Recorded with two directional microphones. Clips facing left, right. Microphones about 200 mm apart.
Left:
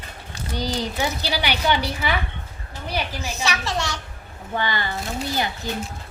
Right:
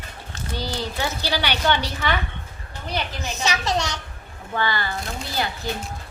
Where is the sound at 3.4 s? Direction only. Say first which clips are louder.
Right 3 dB; 20° right (ahead or behind).